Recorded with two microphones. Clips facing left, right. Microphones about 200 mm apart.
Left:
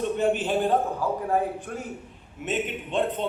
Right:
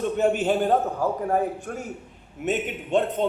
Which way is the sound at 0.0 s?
45° right (ahead or behind).